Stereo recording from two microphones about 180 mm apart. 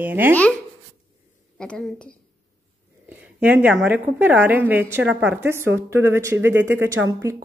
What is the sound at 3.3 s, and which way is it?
A woman's voice, 10° right (ahead or behind).